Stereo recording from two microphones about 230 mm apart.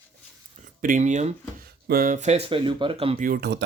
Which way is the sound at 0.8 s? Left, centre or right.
Right.